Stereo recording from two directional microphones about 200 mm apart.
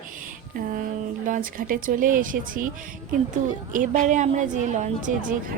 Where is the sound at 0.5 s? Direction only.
45° right (ahead or behind).